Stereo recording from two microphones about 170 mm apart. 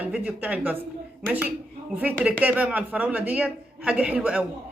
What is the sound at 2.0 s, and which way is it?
A man's voice, 10° right (ahead or behind).